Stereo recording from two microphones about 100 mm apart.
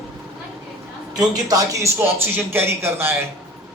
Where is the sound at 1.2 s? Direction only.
40° right (ahead or behind).